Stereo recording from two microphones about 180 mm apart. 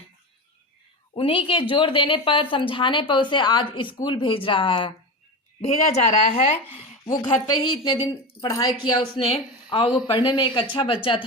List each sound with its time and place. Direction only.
1.1 s a woman's voice: 30° left (ahead or behind)